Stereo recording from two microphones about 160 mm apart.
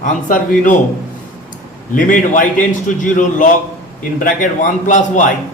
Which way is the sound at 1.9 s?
55° left (ahead or behind).